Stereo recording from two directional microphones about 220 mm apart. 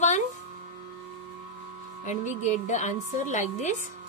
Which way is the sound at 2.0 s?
35° left (ahead or behind).